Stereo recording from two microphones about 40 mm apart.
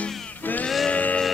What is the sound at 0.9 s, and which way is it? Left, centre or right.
Music, left.